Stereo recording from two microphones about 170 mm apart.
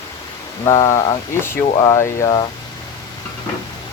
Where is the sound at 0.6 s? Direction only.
20° left (ahead or behind).